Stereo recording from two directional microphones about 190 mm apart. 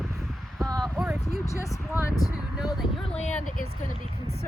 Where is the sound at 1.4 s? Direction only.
15° left (ahead or behind).